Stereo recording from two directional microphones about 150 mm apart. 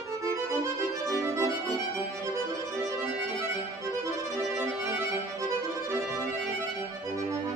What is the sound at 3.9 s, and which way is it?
Music, 20° right (ahead or behind).